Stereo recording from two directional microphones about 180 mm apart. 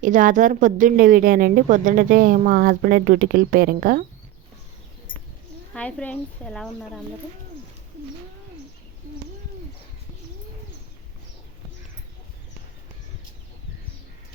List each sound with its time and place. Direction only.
0.0 s a woman's voice: 45° right (ahead or behind)
5.7 s speech: 5° left (ahead or behind)